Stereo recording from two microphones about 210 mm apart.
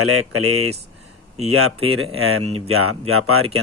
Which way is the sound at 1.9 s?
85° right.